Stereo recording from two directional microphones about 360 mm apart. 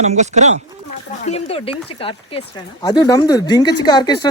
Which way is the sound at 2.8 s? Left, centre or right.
Centre.